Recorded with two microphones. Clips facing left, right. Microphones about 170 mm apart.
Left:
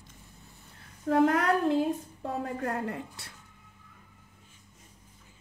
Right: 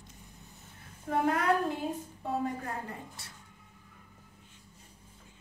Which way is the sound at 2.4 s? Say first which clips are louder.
Left 3 dB; 75° left (ahead or behind).